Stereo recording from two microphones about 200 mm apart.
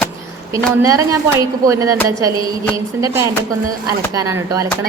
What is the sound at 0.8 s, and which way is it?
Speech, 15° right (ahead or behind).